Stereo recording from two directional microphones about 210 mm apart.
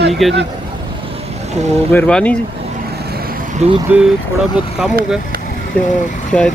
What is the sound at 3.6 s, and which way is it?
Speech, 30° right (ahead or behind).